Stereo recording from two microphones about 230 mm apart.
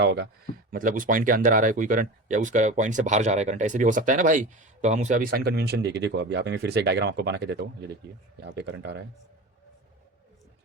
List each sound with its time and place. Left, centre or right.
0.0 s speech: right
0.7 s speech: right